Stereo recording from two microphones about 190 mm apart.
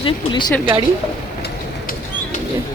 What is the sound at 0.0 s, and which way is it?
Speech, 25° left (ahead or behind).